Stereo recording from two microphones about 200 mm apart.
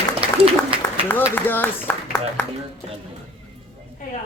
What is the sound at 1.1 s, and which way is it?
Speech, 10° left (ahead or behind).